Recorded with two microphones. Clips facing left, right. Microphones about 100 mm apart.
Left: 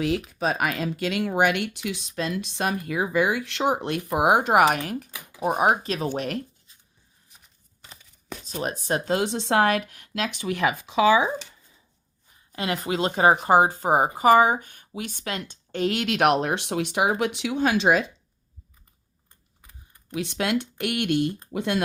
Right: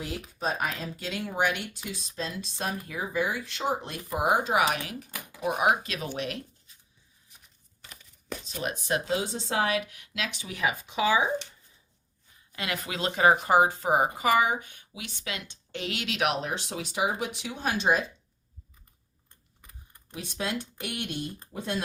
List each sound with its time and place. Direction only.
0.0 s speech: 90° left; by 5.0 s 50° left (ahead or behind)
5.4 s speech: 40° left (ahead or behind)
8.4 s speech: 40° left (ahead or behind)
9.1 s speech: 70° left (ahead or behind)
12.5 s speech: 35° left (ahead or behind); by 18.1 s 90° left
20.1 s speech: 85° left